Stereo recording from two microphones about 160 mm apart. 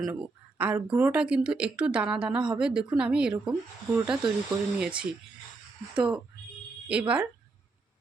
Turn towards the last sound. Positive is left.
turn(degrees=-10)  # may be behind; listen again after turning